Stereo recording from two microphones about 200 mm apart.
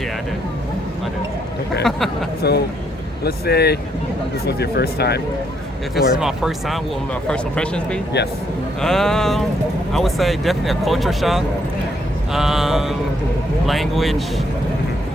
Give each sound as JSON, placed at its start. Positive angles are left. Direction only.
{"t": 2.4, "sound": "speech", "side_deg": 55}
{"t": 6.0, "sound": "speech", "side_deg": 0}